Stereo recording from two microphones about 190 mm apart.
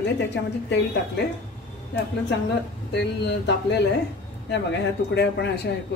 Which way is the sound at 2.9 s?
65° left (ahead or behind).